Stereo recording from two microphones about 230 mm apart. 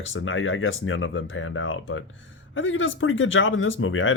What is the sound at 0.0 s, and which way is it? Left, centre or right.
Speech, left.